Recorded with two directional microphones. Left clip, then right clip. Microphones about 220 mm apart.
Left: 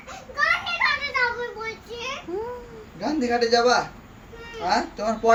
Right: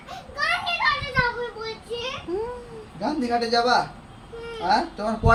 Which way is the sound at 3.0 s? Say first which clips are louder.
Left 1 dB; 5° right (ahead or behind).